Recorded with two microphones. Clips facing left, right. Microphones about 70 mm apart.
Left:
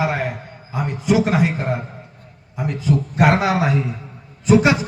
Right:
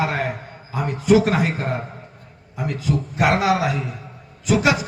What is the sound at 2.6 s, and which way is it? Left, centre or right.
A man's voice, left.